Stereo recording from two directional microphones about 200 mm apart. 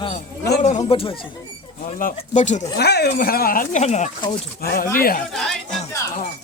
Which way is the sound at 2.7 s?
55° left (ahead or behind).